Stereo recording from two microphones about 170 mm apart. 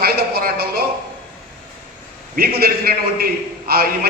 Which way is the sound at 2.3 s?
65° right (ahead or behind).